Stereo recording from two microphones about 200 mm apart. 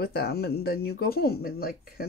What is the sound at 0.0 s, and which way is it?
Speech, 50° left (ahead or behind).